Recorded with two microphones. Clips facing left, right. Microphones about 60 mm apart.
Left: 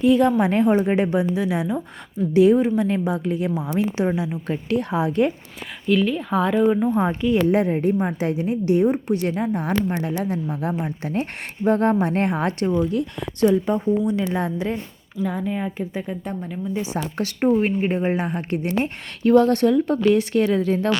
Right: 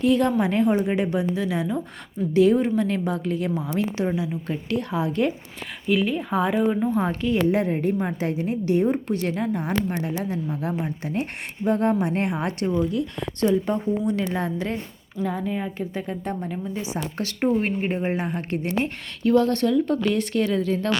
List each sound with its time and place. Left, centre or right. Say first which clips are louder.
0.0 s speech: left 3 dB; centre
0.4 s a woman's voice: left 3 dB; left
5.9 s speech: left 3 dB; centre
6.8 s a woman's voice: left 3 dB; left
8.3 s a woman's voice: left 3 dB; right
8.8 s a woman's voice: left 3 dB; centre
13.5 s speech: left 2 dB; centre
14.0 s a woman's voice: left 2 dB; centre
14.3 s a woman's voice: left 2 dB; centre
15.2 s a woman's voice: left 2 dB; centre
17.5 s a woman's voice: left 5 dB; left
19.8 s a woman's voice: left 4 dB; centre